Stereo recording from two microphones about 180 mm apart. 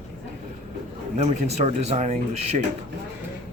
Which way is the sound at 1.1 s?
40° right (ahead or behind).